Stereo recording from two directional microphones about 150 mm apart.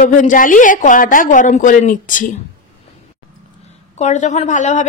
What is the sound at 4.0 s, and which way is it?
Speech, 50° left (ahead or behind).